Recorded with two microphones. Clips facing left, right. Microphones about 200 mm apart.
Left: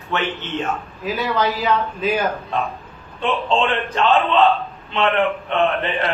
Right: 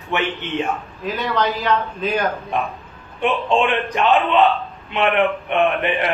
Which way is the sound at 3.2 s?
15° right (ahead or behind).